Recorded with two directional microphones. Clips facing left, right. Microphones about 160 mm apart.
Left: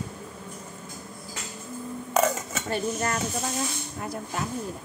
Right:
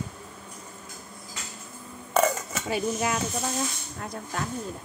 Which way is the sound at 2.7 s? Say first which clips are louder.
Right 1 dB; 10° right (ahead or behind).